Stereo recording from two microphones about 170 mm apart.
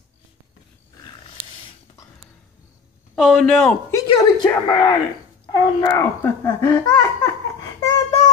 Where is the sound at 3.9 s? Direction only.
25° left (ahead or behind).